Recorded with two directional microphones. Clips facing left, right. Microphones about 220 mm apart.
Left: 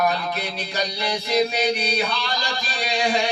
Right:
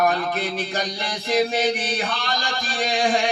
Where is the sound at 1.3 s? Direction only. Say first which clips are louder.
Right 1 dB; 50° right (ahead or behind).